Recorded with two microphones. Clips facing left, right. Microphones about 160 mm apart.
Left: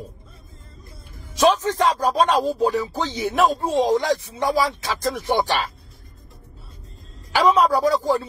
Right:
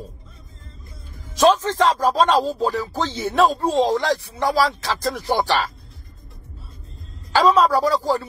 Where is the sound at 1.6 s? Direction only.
15° left (ahead or behind).